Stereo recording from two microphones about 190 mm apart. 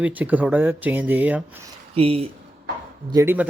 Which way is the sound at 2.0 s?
30° right (ahead or behind).